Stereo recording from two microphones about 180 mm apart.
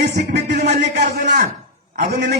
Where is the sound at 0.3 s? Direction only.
65° right (ahead or behind).